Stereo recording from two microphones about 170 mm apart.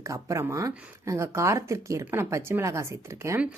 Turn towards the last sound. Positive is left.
turn(degrees=-10)  # may be behind; listen again after turning